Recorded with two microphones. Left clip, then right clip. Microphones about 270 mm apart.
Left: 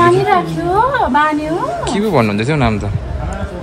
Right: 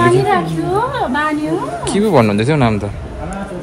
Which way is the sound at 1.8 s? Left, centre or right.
Centre.